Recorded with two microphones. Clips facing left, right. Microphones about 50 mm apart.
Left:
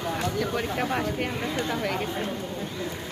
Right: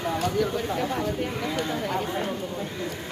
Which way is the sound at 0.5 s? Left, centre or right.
Left.